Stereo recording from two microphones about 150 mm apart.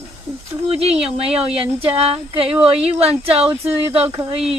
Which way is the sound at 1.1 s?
40° right (ahead or behind).